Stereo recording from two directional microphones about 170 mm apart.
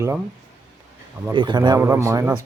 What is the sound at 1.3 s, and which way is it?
A man's voice, 25° right (ahead or behind).